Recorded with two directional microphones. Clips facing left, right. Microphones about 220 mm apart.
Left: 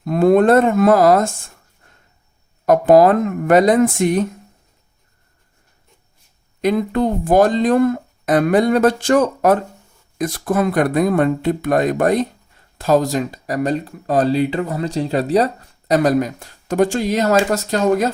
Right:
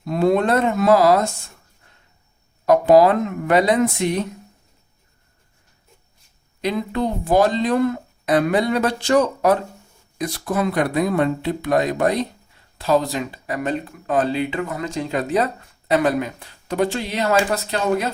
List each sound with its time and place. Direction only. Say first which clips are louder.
0.0 s speech: left 5 dB; 50° left (ahead or behind)
2.6 s speech: left 2 dB; 50° left (ahead or behind)
6.6 s speech: left 5 dB; 50° left (ahead or behind)